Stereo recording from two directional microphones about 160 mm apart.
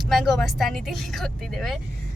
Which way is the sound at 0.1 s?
Centre (ahead or behind).